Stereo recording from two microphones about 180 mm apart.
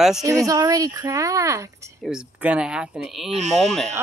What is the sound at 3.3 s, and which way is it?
Speech, 40° right (ahead or behind).